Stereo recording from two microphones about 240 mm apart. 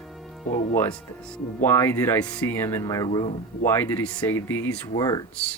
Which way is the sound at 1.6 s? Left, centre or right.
Centre.